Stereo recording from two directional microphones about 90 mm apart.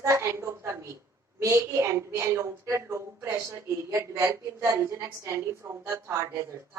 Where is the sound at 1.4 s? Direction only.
35° right (ahead or behind).